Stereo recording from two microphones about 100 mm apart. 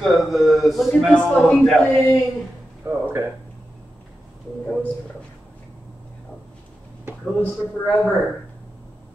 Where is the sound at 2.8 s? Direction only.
25° right (ahead or behind).